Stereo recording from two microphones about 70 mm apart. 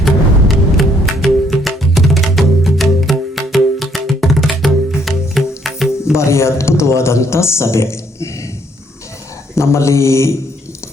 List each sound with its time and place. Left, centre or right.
0.0 s music: centre
6.1 s a man's voice: left
9.6 s speech: left